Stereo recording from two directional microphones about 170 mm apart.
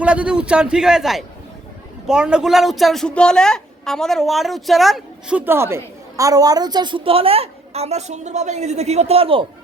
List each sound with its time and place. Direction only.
0.0 s a woman's voice: 5° right (ahead or behind)
5.5 s a woman's voice: 15° right (ahead or behind); by 9.5 s 35° right (ahead or behind)